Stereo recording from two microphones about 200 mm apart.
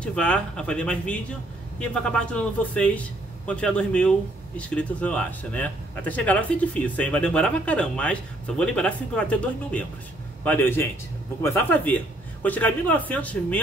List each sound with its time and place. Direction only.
0.0 s a man's voice: 5° left (ahead or behind)